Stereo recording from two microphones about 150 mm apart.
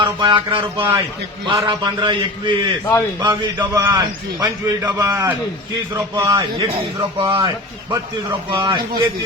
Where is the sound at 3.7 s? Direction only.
25° right (ahead or behind).